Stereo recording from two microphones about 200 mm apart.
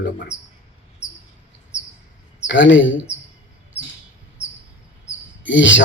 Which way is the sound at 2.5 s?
70° left (ahead or behind).